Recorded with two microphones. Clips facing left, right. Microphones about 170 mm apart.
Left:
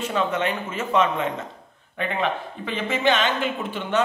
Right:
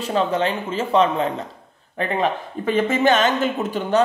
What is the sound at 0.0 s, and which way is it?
A man's voice, 35° right (ahead or behind).